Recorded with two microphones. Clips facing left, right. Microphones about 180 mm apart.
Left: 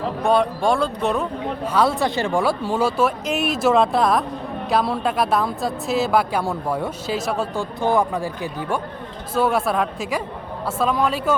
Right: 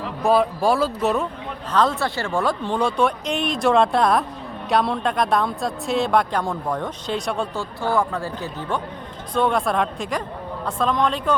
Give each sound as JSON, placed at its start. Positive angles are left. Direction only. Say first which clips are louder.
{"t": 0.2, "sound": "speech", "louder": "right 1 dB", "side_deg": 0}
{"t": 7.6, "sound": "speech", "louder": "left 4 dB", "side_deg": 20}